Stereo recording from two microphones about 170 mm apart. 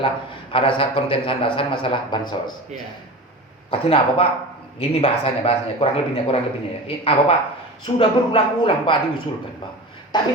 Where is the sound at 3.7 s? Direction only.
35° left (ahead or behind).